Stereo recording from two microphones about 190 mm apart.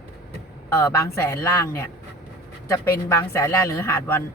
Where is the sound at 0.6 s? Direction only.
15° left (ahead or behind).